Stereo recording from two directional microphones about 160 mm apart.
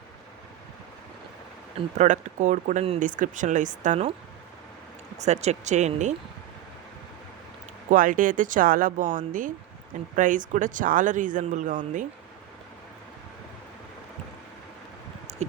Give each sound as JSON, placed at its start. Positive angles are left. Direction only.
{"t": 2.0, "sound": "speech", "side_deg": -50}
{"t": 3.0, "sound": "speech", "side_deg": -55}
{"t": 5.2, "sound": "speech", "side_deg": -45}
{"t": 7.9, "sound": "speech", "side_deg": -55}
{"t": 15.3, "sound": "a sound", "side_deg": -45}